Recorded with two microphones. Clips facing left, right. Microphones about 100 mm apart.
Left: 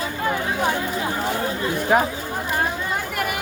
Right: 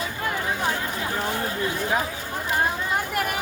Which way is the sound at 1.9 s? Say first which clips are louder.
Left 8 dB; 55° left (ahead or behind).